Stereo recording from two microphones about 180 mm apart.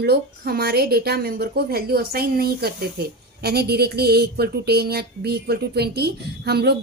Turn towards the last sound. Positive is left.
turn(degrees=-65)  # may be behind; listen again after turning